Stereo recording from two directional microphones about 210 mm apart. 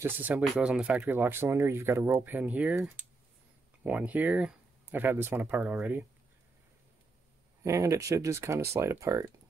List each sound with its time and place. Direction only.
0.0 s speech: 10° right (ahead or behind)
7.6 s speech: 15° right (ahead or behind)